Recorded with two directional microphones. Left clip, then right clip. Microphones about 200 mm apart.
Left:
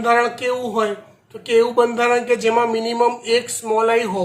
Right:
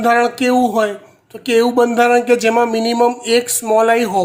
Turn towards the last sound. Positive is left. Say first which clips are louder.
# right 4 dB
turn(degrees=-60)  # may be behind; listen again after turning